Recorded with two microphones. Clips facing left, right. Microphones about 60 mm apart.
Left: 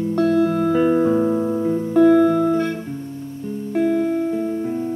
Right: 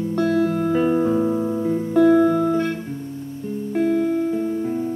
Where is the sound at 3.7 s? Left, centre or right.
Centre.